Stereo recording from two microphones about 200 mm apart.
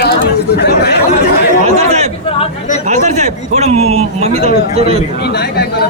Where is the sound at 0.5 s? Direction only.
55° left (ahead or behind).